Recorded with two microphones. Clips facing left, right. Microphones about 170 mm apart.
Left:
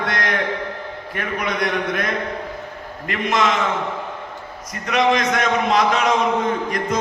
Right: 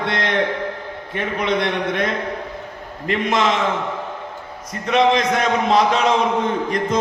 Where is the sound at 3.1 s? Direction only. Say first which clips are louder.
Right 1 dB; 30° right (ahead or behind).